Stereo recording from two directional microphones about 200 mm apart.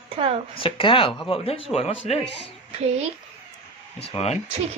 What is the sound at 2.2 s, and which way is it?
Speech, 60° left (ahead or behind).